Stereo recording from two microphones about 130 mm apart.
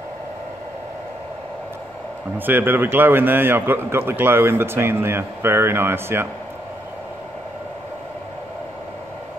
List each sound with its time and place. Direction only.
2.3 s a man's voice: 15° right (ahead or behind)